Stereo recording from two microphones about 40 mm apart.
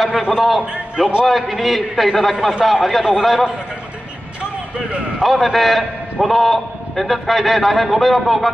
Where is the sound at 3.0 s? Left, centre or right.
Centre.